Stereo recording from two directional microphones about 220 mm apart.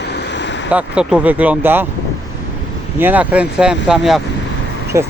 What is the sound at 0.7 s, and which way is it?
Speech, 5° right (ahead or behind).